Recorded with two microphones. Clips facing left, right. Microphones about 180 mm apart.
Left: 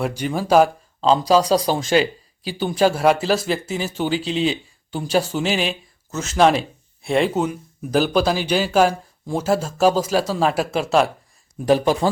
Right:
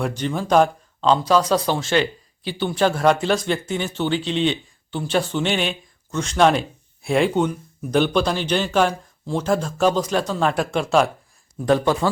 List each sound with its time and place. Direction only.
0.0 s speech: 10° left (ahead or behind)
1.3 s speech: 35° left (ahead or behind)
1.8 s speech: 10° left (ahead or behind)